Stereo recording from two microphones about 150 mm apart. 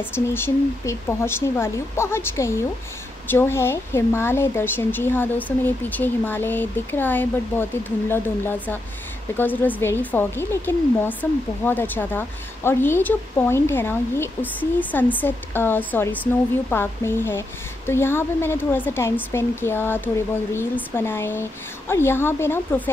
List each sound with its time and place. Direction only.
0.0 s speech: 15° left (ahead or behind)